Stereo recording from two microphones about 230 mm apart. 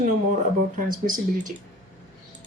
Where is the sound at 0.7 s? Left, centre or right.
Right.